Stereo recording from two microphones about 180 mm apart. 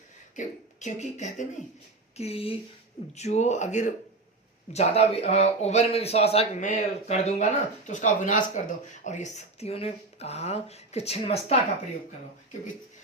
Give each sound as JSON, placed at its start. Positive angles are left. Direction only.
{"t": 0.3, "sound": "speech", "side_deg": 40}